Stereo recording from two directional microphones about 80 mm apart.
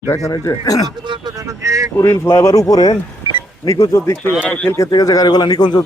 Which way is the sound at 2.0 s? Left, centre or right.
Left.